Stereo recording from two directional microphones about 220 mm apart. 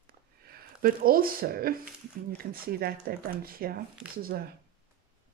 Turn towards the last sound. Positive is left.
turn(degrees=-40)  # may be behind; listen again after turning